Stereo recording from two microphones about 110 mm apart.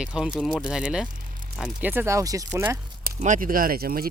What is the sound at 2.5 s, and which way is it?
Speech, 20° right (ahead or behind).